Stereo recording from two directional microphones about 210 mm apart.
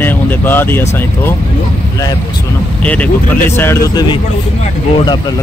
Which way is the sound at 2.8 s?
5° left (ahead or behind).